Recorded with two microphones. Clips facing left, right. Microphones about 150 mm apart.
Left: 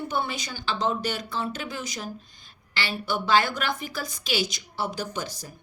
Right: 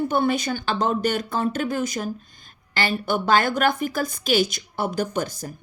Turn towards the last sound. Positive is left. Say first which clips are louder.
# right 7 dB
turn(degrees=-50)  # may be behind; listen again after turning